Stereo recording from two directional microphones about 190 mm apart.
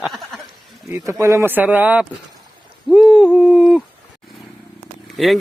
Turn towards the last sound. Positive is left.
turn(degrees=0)  # may be behind; listen again after turning